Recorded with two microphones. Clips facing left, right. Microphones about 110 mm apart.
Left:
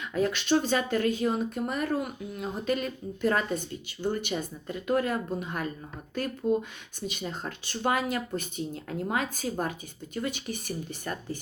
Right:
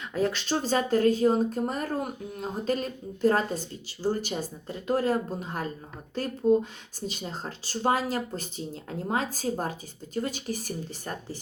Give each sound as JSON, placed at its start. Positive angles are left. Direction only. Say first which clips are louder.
{"t": 0.1, "sound": "speech", "louder": "left 2 dB", "side_deg": -40}